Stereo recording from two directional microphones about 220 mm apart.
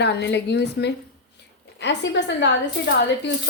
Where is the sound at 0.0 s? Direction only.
50° left (ahead or behind).